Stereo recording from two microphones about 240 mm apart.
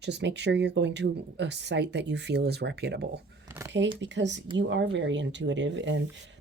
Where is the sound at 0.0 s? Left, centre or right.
Right.